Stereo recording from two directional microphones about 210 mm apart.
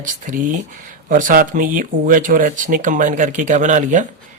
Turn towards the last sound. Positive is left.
turn(degrees=-35)  # may be behind; listen again after turning